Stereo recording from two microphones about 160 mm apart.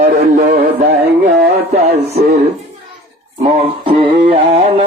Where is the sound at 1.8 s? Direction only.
40° right (ahead or behind).